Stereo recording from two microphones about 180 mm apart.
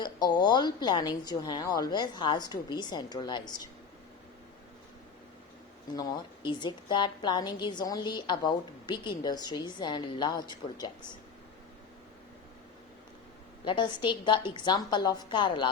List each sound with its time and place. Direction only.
0.0 s a woman's voice: 25° left (ahead or behind)
6.0 s a woman's voice: 25° left (ahead or behind)
13.7 s a woman's voice: 25° left (ahead or behind)